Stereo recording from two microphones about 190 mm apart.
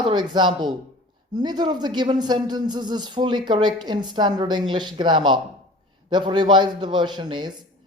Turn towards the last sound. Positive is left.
turn(degrees=-25)  # may be behind; listen again after turning